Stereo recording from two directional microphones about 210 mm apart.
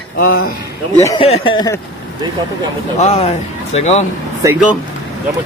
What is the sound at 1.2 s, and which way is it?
Speech, 25° left (ahead or behind).